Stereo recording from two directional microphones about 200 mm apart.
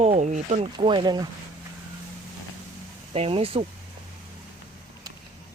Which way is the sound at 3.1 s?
30° right (ahead or behind).